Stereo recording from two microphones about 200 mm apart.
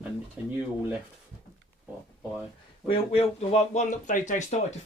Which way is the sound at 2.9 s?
30° left (ahead or behind).